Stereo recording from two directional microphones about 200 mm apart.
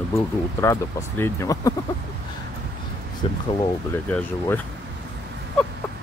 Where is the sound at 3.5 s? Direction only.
10° left (ahead or behind).